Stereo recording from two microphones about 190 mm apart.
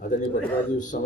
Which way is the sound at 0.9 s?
55° left (ahead or behind).